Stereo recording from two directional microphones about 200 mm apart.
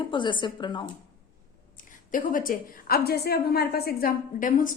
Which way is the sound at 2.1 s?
40° left (ahead or behind).